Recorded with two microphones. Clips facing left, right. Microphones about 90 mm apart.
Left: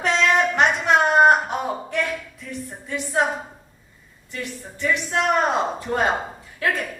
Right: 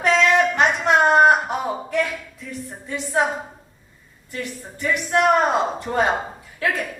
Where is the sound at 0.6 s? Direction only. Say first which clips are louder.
Right 1 dB; centre (ahead or behind).